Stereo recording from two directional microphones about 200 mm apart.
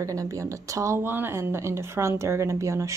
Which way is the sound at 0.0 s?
15° right (ahead or behind).